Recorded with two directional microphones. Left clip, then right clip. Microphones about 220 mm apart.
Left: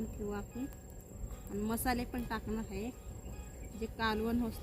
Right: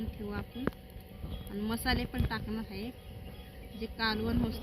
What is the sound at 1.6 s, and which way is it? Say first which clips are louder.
Speech: right 2 dB; 15° left (ahead or behind).